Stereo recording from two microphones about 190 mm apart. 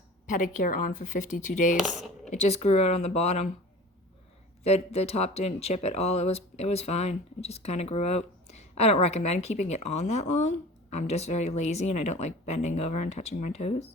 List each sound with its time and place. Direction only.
0.3 s speech: 45° left (ahead or behind)
4.6 s speech: 35° left (ahead or behind)